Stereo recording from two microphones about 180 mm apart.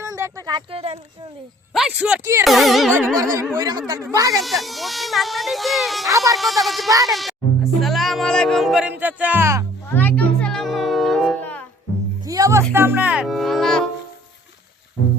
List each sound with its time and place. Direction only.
0.0 s a sound: 15° right (ahead or behind); by 0.9 s 30° right (ahead or behind)
1.7 s speech: 5° right (ahead or behind)
3.3 s speech: 20° right (ahead or behind)
4.4 s speech: centre (ahead or behind)
6.1 s speech: 20° right (ahead or behind)
6.3 s speech: centre (ahead or behind)
7.1 s music: centre (ahead or behind)
9.9 s music: 10° left (ahead or behind)
12.2 s music: 20° right (ahead or behind); by 13.8 s centre (ahead or behind)